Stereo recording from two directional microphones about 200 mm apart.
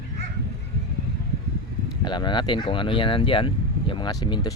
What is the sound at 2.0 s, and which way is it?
Speech, 20° left (ahead or behind).